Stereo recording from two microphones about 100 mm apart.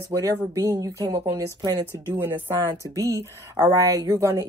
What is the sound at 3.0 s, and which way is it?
Speech, 30° right (ahead or behind).